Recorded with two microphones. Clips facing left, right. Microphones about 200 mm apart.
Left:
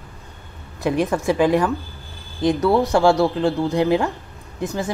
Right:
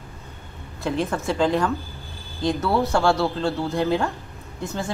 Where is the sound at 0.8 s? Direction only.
15° left (ahead or behind).